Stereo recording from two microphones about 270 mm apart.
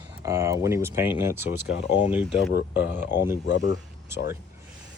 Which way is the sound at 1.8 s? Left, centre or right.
Left.